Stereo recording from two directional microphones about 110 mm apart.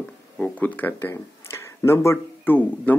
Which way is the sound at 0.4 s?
15° left (ahead or behind).